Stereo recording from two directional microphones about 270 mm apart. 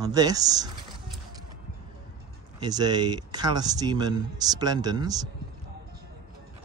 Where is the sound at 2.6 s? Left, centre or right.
Centre.